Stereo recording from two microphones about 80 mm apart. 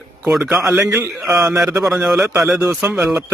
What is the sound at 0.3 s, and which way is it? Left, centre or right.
Speech, centre.